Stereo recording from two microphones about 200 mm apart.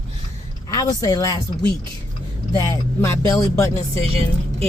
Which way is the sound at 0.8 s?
20° left (ahead or behind).